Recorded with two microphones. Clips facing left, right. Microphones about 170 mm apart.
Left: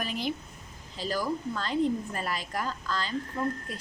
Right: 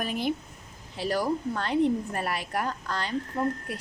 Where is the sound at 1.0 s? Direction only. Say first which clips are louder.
Right 3 dB; 65° right (ahead or behind).